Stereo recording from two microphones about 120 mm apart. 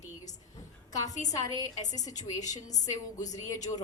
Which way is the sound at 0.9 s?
30° left (ahead or behind).